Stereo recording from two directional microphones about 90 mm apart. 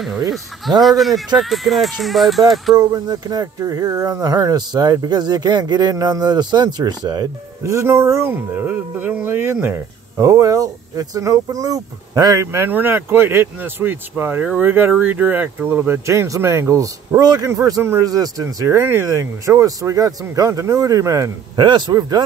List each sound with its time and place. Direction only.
0.3 s speech: centre (ahead or behind)
2.7 s speech: 45° right (ahead or behind)
7.6 s speech: 35° right (ahead or behind)
9.8 s speech: 35° right (ahead or behind)
12.4 s speech: 25° right (ahead or behind)
21.5 s a man's voice: 55° right (ahead or behind)